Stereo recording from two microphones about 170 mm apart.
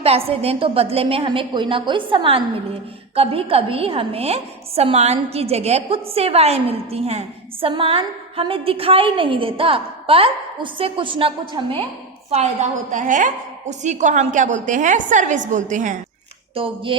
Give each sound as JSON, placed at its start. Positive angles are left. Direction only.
{"t": 0.0, "sound": "a woman's voice", "side_deg": -35}
{"t": 12.3, "sound": "a woman's voice", "side_deg": -45}
{"t": 16.6, "sound": "a woman's voice", "side_deg": -30}